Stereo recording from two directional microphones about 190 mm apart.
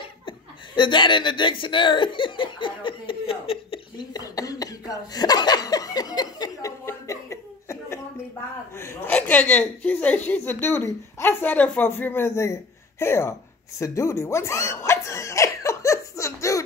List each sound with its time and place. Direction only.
0.7 s chuckle: 25° left (ahead or behind)
8.7 s speech: 10° left (ahead or behind)